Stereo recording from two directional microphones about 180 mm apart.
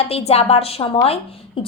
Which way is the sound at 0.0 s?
35° left (ahead or behind).